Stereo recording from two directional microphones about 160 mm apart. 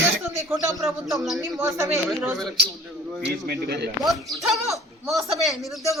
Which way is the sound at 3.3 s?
90° right.